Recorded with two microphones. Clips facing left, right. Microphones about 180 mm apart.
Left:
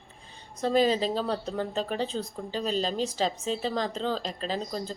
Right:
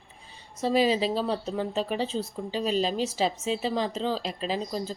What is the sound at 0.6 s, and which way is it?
Speech, 5° right (ahead or behind).